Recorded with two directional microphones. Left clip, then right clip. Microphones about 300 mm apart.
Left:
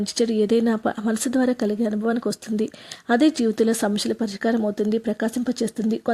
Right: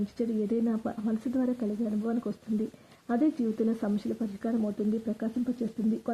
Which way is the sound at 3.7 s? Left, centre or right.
Left.